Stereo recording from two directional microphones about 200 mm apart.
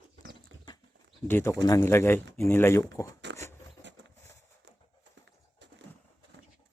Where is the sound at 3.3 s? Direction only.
15° left (ahead or behind).